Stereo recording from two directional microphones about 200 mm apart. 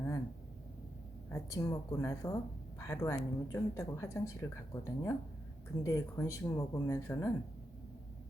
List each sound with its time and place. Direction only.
1.3 s speech: 15° left (ahead or behind)